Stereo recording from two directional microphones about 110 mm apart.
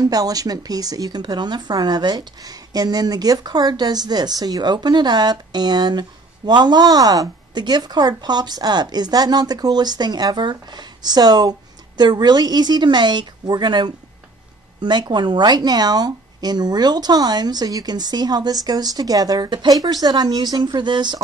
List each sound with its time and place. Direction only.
0.0 s a woman's voice: 35° right (ahead or behind)